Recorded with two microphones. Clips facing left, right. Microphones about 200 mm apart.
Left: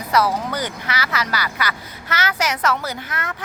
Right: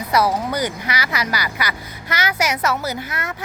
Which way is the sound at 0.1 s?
10° right (ahead or behind).